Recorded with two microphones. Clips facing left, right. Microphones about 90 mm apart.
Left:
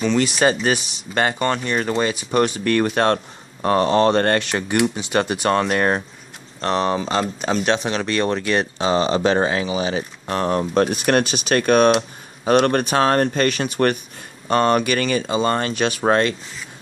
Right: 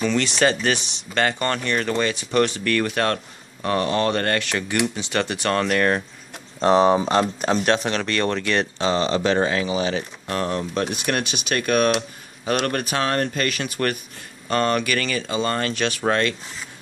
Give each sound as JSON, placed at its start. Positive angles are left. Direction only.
{"t": 0.2, "sound": "speech", "side_deg": 15}
{"t": 6.6, "sound": "speech", "side_deg": -10}
{"t": 7.1, "sound": "speech", "side_deg": 0}
{"t": 10.8, "sound": "speech", "side_deg": 45}